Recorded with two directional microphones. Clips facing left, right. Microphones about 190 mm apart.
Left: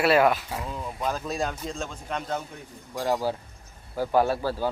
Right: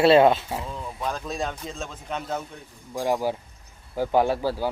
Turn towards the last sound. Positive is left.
turn(degrees=-10)  # may be behind; listen again after turning